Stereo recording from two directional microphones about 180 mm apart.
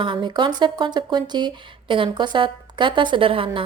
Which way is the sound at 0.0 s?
25° right (ahead or behind).